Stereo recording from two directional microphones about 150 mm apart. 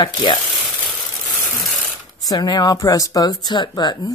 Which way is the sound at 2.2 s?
25° left (ahead or behind).